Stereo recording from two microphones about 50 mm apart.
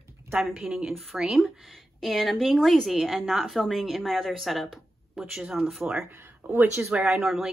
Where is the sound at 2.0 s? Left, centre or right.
Centre.